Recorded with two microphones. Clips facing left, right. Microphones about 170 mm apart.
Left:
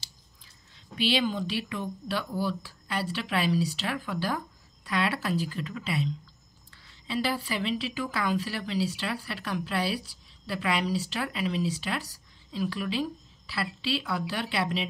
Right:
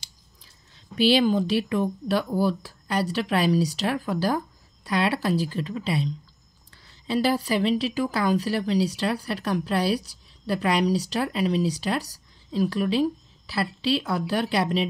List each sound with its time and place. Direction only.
0.9 s speech: 40° right (ahead or behind)